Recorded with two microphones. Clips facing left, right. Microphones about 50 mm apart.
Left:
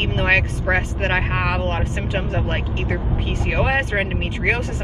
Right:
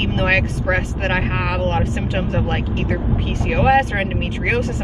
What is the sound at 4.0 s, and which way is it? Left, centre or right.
Speech, centre.